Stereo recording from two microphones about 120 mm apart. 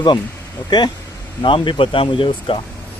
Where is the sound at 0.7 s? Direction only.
35° left (ahead or behind).